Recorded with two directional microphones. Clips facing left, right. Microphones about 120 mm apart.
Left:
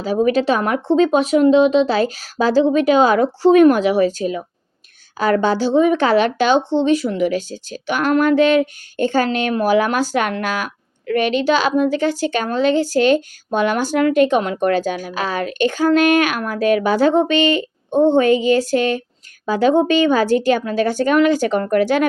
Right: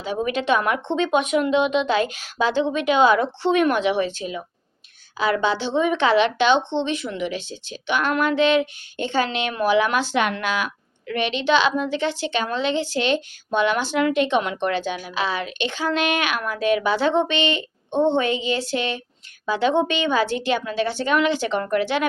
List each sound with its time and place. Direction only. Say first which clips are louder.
0.0 s a woman's voice: left 8 dB; 40° left (ahead or behind)